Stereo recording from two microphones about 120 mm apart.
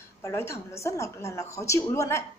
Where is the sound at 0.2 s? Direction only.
20° left (ahead or behind).